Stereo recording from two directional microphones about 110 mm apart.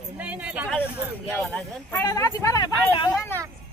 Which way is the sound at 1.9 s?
35° left (ahead or behind).